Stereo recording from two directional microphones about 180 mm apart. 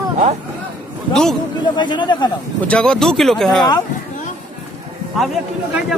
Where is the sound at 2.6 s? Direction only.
5° left (ahead or behind).